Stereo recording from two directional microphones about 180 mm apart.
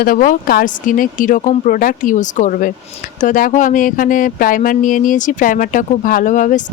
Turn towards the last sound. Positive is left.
turn(degrees=45)  # may be behind; listen again after turning